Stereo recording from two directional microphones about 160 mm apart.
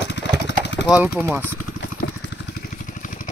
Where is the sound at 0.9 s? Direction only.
10° right (ahead or behind).